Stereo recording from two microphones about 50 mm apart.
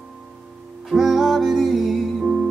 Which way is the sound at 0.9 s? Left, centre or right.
Centre.